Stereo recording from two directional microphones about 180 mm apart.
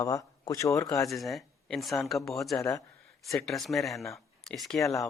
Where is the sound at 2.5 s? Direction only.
15° left (ahead or behind).